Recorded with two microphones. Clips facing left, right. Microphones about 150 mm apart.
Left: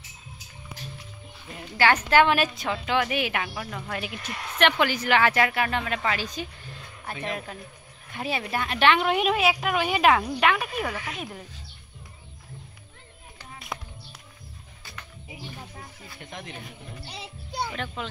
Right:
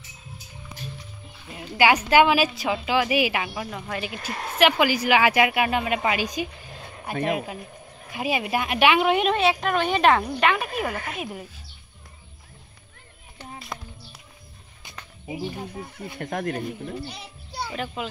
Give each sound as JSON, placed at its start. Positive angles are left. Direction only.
{"t": 1.5, "sound": "a woman's voice", "side_deg": -10}
{"t": 4.2, "sound": "speech", "side_deg": -40}
{"t": 4.6, "sound": "a woman's voice", "side_deg": -5}
{"t": 10.9, "sound": "speech", "side_deg": -50}
{"t": 11.1, "sound": "a woman's voice", "side_deg": -5}
{"t": 13.7, "sound": "music", "side_deg": 0}
{"t": 15.2, "sound": "speech", "side_deg": -40}
{"t": 16.0, "sound": "speech", "side_deg": -60}
{"t": 17.7, "sound": "a woman's voice", "side_deg": -5}